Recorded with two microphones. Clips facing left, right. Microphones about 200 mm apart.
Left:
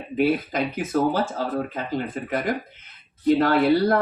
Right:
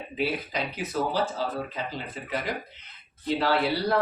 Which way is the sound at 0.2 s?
50° left (ahead or behind).